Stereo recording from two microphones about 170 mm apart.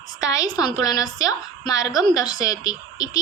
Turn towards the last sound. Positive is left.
turn(degrees=20)  # may be behind; listen again after turning